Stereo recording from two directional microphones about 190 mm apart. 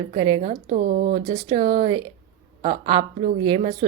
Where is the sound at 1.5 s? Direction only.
25° right (ahead or behind).